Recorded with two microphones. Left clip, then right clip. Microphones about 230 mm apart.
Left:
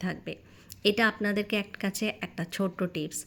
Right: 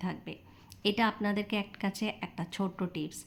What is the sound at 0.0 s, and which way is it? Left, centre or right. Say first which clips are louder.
A woman's voice: left 4 dB; centre.